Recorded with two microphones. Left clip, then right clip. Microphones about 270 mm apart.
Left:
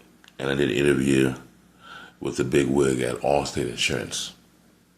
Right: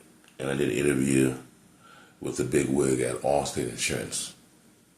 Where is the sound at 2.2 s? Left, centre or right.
Left.